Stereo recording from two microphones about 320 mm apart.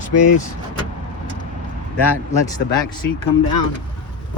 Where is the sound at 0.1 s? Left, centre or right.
Left.